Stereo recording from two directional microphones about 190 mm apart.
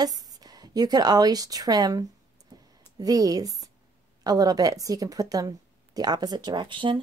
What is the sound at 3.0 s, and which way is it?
A woman's voice, 20° right (ahead or behind).